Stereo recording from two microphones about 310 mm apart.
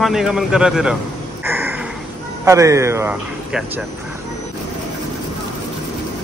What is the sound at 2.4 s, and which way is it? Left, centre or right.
Speech, centre.